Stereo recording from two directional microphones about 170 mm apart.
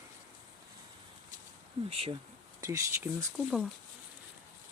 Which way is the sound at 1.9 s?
35° right (ahead or behind).